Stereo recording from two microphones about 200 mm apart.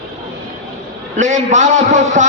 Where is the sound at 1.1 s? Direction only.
35° right (ahead or behind).